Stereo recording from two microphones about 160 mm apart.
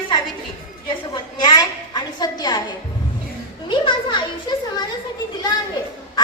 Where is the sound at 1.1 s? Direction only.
25° left (ahead or behind).